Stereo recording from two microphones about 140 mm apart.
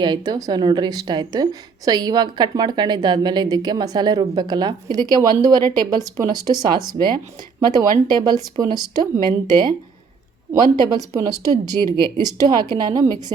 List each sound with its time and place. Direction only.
0.0 s a woman's voice: 30° right (ahead or behind)